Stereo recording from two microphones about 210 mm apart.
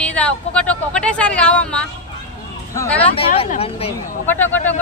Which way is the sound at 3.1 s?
25° left (ahead or behind).